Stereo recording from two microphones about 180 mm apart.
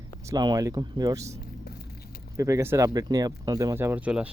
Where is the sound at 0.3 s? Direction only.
20° right (ahead or behind).